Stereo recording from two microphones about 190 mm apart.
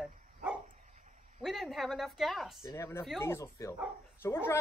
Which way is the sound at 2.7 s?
15° left (ahead or behind).